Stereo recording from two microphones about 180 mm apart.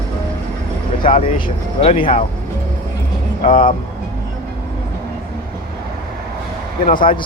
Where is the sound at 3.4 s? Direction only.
50° left (ahead or behind).